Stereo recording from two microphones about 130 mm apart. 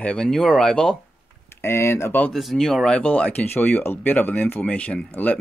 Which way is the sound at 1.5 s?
20° left (ahead or behind).